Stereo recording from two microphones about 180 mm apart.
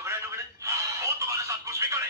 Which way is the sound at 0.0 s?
15° right (ahead or behind).